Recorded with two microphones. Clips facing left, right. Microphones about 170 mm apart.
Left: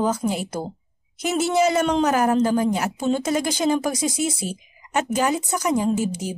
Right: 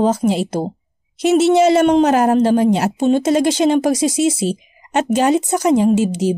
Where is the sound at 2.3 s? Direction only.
65° right (ahead or behind); by 4.6 s 90° right.